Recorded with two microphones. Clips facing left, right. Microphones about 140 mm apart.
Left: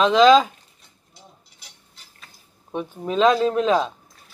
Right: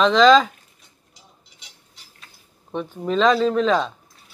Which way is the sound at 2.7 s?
10° left (ahead or behind).